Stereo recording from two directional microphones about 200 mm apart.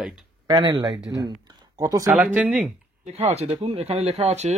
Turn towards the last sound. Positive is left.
turn(degrees=-35)  # may be behind; listen again after turning